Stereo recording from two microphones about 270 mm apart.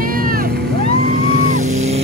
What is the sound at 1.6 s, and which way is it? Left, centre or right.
Vehicle, right.